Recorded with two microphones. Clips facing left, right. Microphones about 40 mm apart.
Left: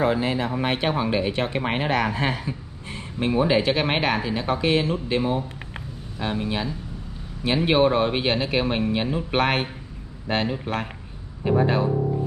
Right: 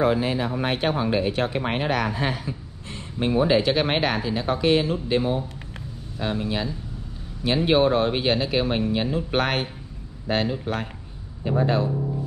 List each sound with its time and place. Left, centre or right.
0.0 s speech: centre
4.5 s speech: centre
11.9 s music: left